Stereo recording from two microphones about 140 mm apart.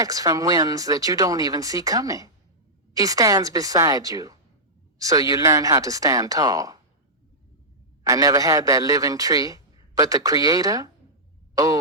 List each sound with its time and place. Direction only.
0.0 s a man's voice: 25° right (ahead or behind)
8.0 s a man's voice: 25° right (ahead or behind)
11.5 s a sound: 25° right (ahead or behind)